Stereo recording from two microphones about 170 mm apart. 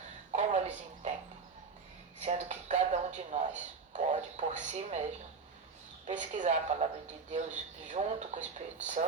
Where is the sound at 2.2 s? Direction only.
45° right (ahead or behind).